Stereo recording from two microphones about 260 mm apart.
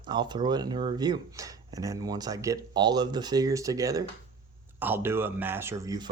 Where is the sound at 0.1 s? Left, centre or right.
Centre.